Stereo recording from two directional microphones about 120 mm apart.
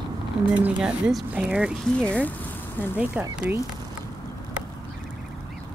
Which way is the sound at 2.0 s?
10° left (ahead or behind).